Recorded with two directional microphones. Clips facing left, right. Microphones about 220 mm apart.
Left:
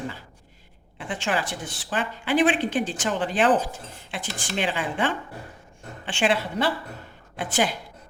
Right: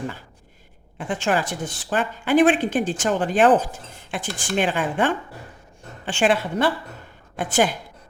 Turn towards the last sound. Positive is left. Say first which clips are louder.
# right 4 dB
turn(degrees=-50)  # may be behind; listen again after turning